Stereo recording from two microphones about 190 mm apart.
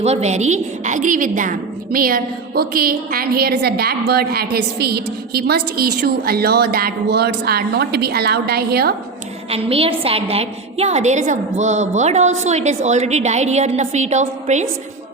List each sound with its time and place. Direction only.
0.0 s a woman's voice: 35° right (ahead or behind); by 9.0 s 55° right (ahead or behind)
9.5 s a woman's voice: 30° right (ahead or behind)